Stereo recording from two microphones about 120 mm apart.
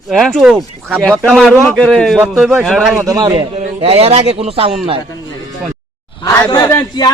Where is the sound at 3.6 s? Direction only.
55° right (ahead or behind).